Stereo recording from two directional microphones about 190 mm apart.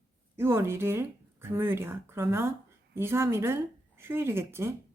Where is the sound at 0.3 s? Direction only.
10° right (ahead or behind).